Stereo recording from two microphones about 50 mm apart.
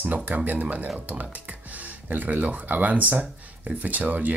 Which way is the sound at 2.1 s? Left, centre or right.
Right.